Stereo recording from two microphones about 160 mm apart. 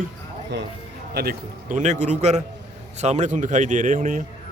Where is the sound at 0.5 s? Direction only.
90° right.